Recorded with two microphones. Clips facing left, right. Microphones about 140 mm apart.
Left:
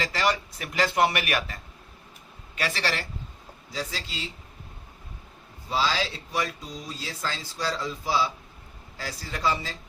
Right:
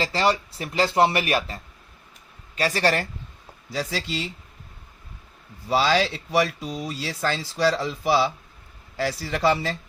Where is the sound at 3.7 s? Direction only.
70° right (ahead or behind).